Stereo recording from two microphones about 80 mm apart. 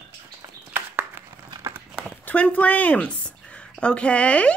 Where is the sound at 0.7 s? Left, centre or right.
Right.